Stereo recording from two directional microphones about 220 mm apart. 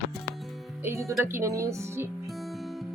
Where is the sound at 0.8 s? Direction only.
15° right (ahead or behind).